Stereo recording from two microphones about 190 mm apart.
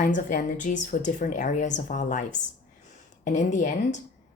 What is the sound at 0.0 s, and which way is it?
Speech, 45° left (ahead or behind).